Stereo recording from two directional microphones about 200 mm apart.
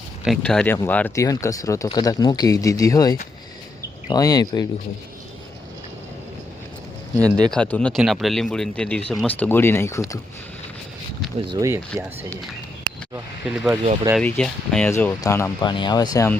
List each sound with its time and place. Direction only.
0.3 s speech: 5° left (ahead or behind)
7.3 s speech: 20° right (ahead or behind)
7.5 s speech: 5° left (ahead or behind)
11.4 s speech: 15° right (ahead or behind)
13.1 s speech: 5° right (ahead or behind)
14.2 s speech: 5° left (ahead or behind)
14.8 s speech: 15° left (ahead or behind)